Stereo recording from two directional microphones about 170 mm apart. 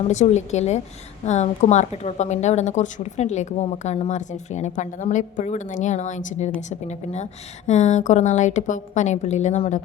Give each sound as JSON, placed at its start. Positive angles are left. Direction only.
{"t": 0.0, "sound": "a woman's voice", "side_deg": 40}